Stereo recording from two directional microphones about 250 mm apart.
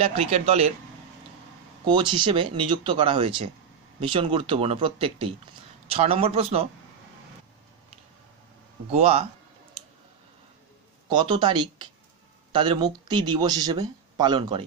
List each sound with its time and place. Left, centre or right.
0.0 s speech: right
1.9 s speech: centre
8.9 s speech: right
11.1 s speech: centre